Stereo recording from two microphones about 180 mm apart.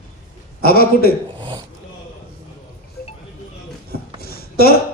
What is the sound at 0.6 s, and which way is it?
Speech, 55° left (ahead or behind).